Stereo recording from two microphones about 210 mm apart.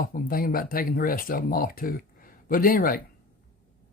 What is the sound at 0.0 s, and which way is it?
Speech, 40° left (ahead or behind).